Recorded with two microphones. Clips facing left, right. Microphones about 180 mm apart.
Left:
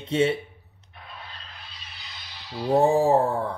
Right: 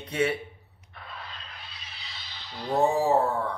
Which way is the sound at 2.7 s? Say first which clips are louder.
Left 4 dB; 35° left (ahead or behind).